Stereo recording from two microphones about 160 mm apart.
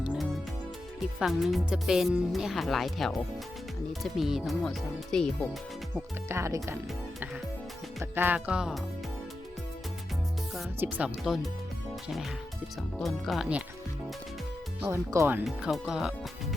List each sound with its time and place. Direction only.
0.0 s music: 5° right (ahead or behind)
1.2 s speech: centre (ahead or behind)
6.2 s speech: 15° right (ahead or behind)
8.1 s speech: 10° right (ahead or behind)
10.8 s speech: 10° right (ahead or behind)
13.0 s speech: centre (ahead or behind)
14.8 s speech: 15° right (ahead or behind)
15.4 s speech: centre (ahead or behind)